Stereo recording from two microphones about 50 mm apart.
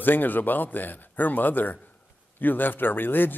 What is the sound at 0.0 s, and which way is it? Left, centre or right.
Speech, left.